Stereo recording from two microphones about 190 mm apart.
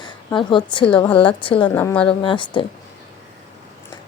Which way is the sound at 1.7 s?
10° left (ahead or behind).